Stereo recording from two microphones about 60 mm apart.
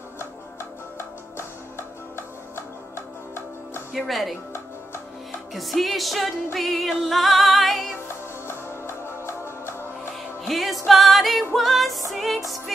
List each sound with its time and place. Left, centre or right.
1.8 s music: left
3.9 s music: centre
5.5 s music: centre
8.5 s music: left
10.4 s music: centre